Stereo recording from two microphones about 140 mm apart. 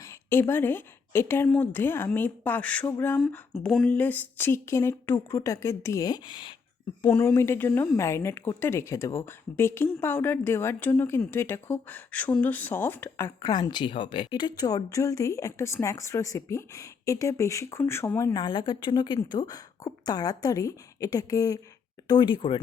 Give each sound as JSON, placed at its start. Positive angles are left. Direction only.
{"t": 0.0, "sound": "a woman's voice", "side_deg": 20}
{"t": 7.0, "sound": "a woman's voice", "side_deg": 10}
{"t": 18.3, "sound": "speech", "side_deg": 30}